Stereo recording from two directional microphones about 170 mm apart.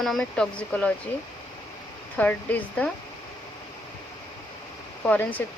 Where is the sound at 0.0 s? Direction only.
Centre (ahead or behind).